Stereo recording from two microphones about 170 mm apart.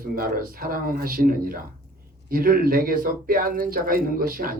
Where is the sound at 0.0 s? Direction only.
55° right (ahead or behind).